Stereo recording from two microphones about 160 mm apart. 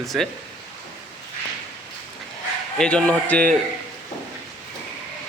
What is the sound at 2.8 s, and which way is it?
Speech, 5° left (ahead or behind).